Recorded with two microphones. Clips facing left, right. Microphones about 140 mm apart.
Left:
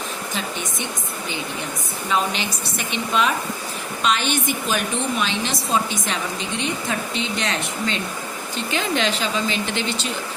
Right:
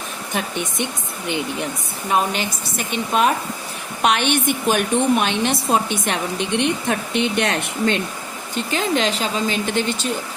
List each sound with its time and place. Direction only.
2.0 s speech: 50° right (ahead or behind)
4.0 s a woman's voice: 60° right (ahead or behind)
8.5 s speech: 40° right (ahead or behind)